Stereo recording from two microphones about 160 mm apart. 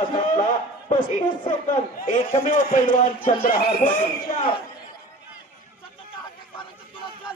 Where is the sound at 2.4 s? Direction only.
50° left (ahead or behind).